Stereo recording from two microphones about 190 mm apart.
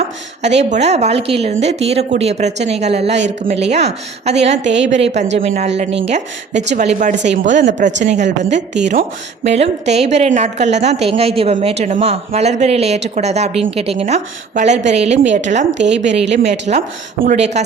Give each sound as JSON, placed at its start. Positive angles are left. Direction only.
{"t": 0.4, "sound": "speech", "side_deg": -35}
{"t": 7.3, "sound": "speech", "side_deg": -65}
{"t": 7.5, "sound": "speech", "side_deg": -40}